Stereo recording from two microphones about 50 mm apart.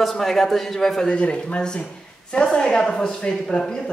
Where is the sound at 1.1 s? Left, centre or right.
Left.